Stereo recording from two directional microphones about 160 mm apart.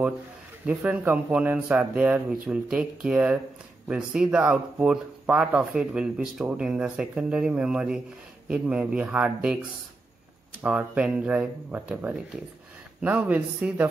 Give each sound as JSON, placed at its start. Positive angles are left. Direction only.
{"t": 0.7, "sound": "speech", "side_deg": -10}
{"t": 10.6, "sound": "speech", "side_deg": -10}